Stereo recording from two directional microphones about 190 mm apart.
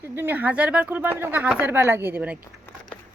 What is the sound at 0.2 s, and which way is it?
Speech, 10° right (ahead or behind).